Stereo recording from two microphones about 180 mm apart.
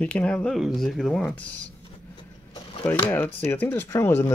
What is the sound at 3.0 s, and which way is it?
Speech, 10° left (ahead or behind).